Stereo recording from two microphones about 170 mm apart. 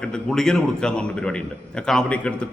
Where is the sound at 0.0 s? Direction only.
5° left (ahead or behind).